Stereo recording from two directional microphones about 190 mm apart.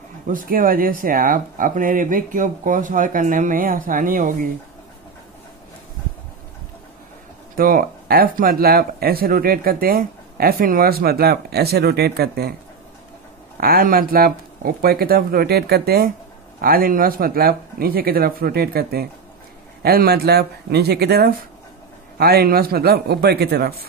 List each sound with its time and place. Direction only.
0.3 s speech: 45° right (ahead or behind)
7.5 s speech: 50° right (ahead or behind)
13.6 s a man's voice: 50° right (ahead or behind)